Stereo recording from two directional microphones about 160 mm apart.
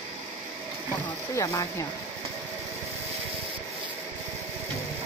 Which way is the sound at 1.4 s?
20° left (ahead or behind).